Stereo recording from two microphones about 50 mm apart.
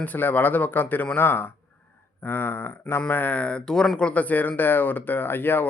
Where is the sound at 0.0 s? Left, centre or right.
Left.